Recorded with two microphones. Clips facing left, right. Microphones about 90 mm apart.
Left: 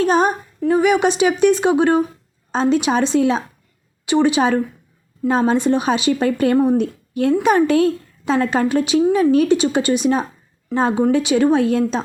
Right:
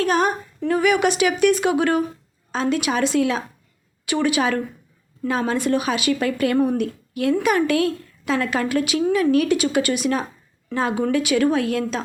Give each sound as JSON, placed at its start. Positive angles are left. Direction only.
{"t": 0.0, "sound": "a woman's voice", "side_deg": 25}